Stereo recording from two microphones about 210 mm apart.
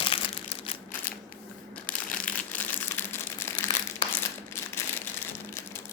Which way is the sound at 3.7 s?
20° left (ahead or behind).